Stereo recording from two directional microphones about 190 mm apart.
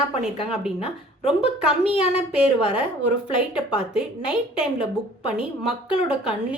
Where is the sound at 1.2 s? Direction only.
30° left (ahead or behind).